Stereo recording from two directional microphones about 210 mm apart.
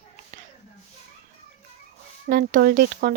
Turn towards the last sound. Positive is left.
turn(degrees=-40)  # may be behind; listen again after turning